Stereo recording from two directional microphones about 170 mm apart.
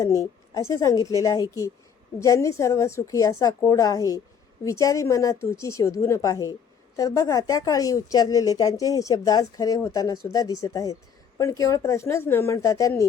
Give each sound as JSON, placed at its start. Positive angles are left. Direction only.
{"t": 0.0, "sound": "a woman's voice", "side_deg": 20}